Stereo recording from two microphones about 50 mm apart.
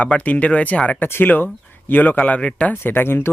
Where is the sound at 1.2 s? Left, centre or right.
Left.